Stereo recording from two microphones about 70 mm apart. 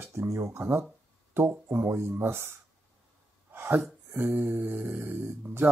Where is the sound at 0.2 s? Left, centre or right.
Right.